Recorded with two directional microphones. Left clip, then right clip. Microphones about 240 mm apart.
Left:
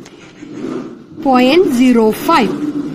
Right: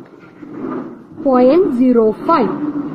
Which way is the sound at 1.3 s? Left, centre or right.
Left.